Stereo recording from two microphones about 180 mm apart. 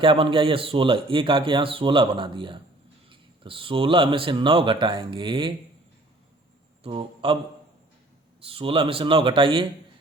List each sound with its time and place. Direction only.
0.0 s speech: 30° right (ahead or behind)
6.8 s speech: 30° right (ahead or behind)
8.4 s speech: 30° right (ahead or behind)